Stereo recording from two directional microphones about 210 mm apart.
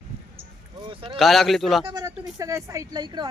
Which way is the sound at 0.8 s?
25° right (ahead or behind).